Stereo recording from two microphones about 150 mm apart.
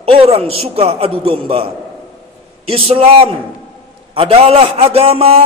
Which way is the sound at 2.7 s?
40° right (ahead or behind).